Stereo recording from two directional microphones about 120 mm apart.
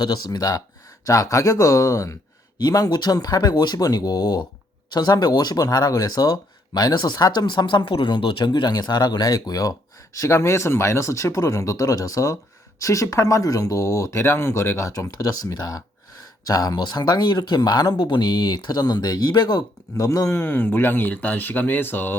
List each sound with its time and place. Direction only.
0.0 s speech: 35° left (ahead or behind); by 22.1 s 15° left (ahead or behind)